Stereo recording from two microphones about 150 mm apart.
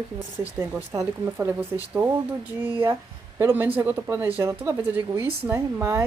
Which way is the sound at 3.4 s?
15° right (ahead or behind).